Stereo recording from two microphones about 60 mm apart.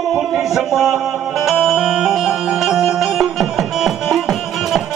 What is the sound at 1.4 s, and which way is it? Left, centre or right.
Music, centre.